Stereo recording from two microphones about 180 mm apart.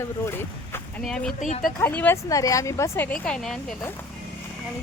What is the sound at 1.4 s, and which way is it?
Speech, 40° left (ahead or behind).